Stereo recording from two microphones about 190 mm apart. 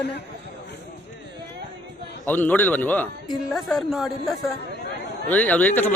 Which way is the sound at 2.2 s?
10° left (ahead or behind).